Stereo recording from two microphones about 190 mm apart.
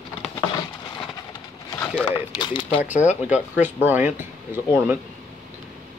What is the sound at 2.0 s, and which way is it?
Speech, 20° left (ahead or behind).